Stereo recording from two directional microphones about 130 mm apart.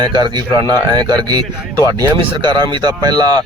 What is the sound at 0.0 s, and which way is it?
Speech, 35° right (ahead or behind).